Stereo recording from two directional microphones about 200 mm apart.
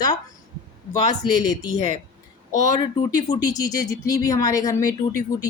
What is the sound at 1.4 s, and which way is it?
Speech, 20° left (ahead or behind).